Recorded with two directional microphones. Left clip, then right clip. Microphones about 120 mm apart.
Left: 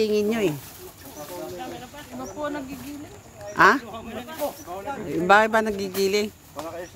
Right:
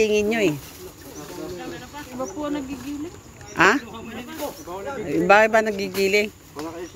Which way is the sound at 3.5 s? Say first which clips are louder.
Left 1 dB; 10° left (ahead or behind).